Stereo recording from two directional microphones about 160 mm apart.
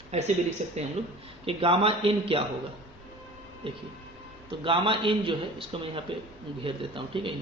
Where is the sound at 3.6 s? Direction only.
35° right (ahead or behind).